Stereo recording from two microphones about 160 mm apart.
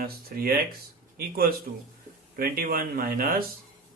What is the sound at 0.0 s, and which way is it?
Speech, 70° right (ahead or behind).